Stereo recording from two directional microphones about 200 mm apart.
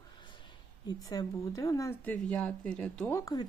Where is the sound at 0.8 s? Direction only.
20° left (ahead or behind).